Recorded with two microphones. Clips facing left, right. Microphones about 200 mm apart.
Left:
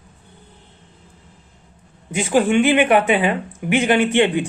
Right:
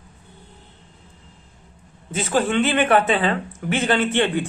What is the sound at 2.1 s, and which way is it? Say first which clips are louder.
Speech: left 4 dB; 15° left (ahead or behind).